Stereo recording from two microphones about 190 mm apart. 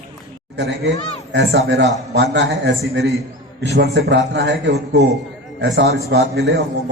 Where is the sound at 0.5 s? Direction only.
65° right (ahead or behind).